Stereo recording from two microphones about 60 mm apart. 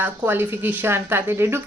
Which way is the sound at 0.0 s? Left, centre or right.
Right.